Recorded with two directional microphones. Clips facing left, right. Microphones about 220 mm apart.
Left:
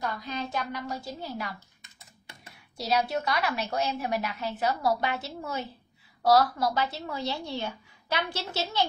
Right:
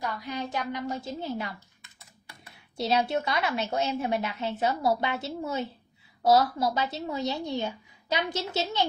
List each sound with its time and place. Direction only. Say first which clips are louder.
0.0 s a woman's voice: even; 15° right (ahead or behind)
2.9 s a woman's voice: even; 25° right (ahead or behind)